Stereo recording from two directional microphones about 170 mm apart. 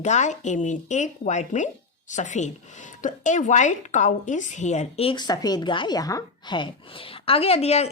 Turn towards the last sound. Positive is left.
turn(degrees=40)  # may be behind; listen again after turning